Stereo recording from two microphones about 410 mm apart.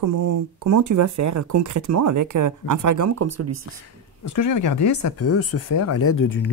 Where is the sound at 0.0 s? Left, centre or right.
Right.